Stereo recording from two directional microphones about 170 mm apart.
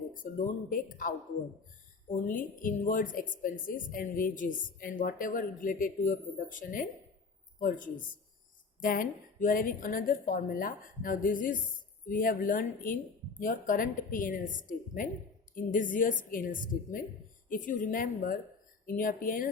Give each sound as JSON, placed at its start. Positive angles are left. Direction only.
{"t": 0.2, "sound": "a woman's voice", "side_deg": 50}